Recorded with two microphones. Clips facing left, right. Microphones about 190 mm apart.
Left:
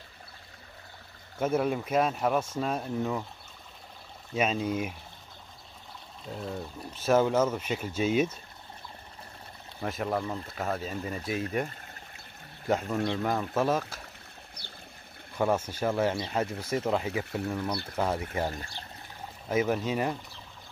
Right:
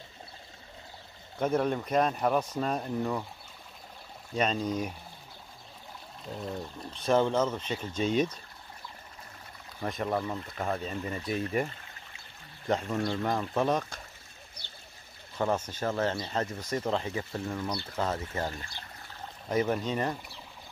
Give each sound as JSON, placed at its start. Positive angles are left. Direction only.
{"t": 1.4, "sound": "speech", "side_deg": 5}
{"t": 4.3, "sound": "speech", "side_deg": 5}
{"t": 6.2, "sound": "speech", "side_deg": 0}
{"t": 9.8, "sound": "speech", "side_deg": 5}
{"t": 11.7, "sound": "pour", "side_deg": 45}
{"t": 12.6, "sound": "speech", "side_deg": 5}
{"t": 15.3, "sound": "speech", "side_deg": 10}
{"t": 19.4, "sound": "speech", "side_deg": 5}